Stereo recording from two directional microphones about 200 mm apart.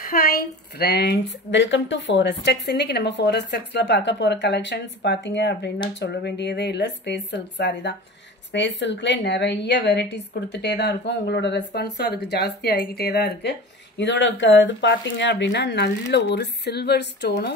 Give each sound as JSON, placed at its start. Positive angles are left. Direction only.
{"t": 0.0, "sound": "a woman's voice", "side_deg": 45}